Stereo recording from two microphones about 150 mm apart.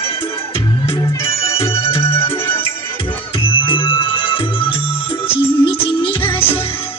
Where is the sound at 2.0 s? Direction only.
15° left (ahead or behind).